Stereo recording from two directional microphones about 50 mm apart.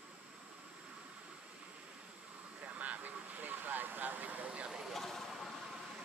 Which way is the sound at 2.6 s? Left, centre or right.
Right.